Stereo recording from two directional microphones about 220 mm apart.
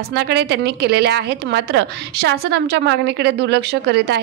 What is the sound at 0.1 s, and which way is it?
A woman's voice, 50° right (ahead or behind).